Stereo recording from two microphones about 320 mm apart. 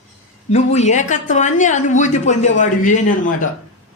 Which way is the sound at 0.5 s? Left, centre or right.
Left.